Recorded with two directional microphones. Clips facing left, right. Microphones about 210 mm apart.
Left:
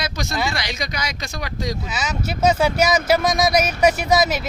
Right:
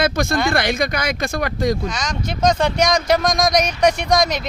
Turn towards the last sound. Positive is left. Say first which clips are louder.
# even
turn(degrees=5)  # may be behind; listen again after turning